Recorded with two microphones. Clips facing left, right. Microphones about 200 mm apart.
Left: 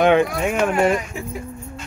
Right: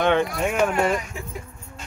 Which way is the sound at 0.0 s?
10° left (ahead or behind).